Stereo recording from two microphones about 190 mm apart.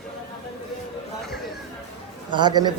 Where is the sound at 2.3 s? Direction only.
20° right (ahead or behind).